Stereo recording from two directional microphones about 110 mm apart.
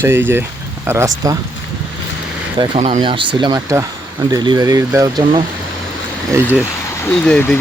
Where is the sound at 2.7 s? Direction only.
90° right.